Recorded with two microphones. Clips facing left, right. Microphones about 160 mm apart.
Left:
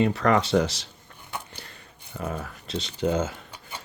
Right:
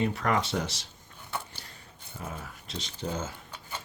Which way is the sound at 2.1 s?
70° left (ahead or behind).